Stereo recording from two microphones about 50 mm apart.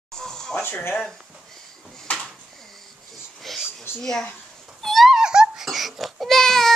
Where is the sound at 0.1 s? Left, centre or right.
Centre.